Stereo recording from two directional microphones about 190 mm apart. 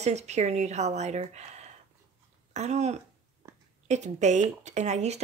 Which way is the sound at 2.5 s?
35° right (ahead or behind).